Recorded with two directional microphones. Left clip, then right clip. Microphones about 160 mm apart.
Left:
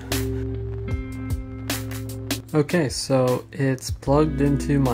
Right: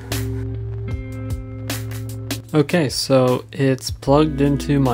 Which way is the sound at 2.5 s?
20° right (ahead or behind).